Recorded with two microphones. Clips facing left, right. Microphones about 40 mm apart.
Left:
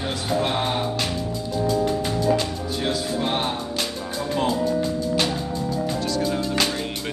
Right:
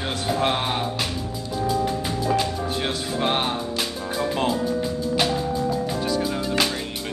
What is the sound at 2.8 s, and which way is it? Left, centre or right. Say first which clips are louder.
Music: left 4 dB; right.